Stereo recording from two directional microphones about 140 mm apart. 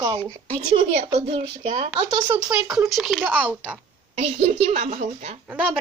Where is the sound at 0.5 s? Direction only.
50° right (ahead or behind).